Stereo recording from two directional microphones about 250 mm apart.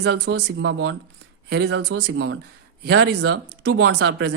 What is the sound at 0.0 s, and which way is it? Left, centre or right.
Speech, right.